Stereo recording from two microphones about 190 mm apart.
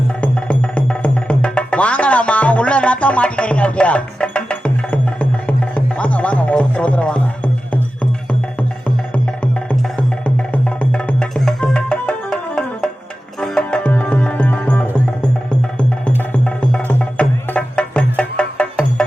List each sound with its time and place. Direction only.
0.2 s music: 5° left (ahead or behind)
9.1 s music: 5° left (ahead or behind)